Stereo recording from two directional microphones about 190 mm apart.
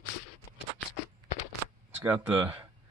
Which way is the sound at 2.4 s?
25° right (ahead or behind).